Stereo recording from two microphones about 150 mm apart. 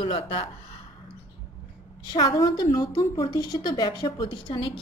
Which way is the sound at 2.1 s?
25° left (ahead or behind).